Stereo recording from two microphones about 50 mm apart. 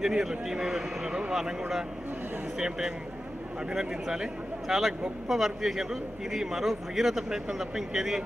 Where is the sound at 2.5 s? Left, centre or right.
Centre.